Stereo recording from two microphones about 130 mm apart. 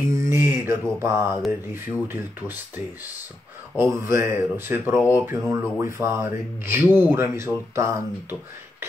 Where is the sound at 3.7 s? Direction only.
20° right (ahead or behind).